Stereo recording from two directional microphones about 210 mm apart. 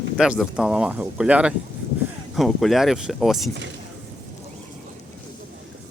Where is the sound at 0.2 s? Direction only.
5° right (ahead or behind).